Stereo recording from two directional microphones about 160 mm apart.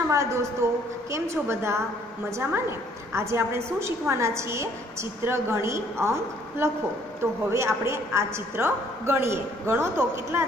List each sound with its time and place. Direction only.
0.1 s a woman's voice: 20° right (ahead or behind)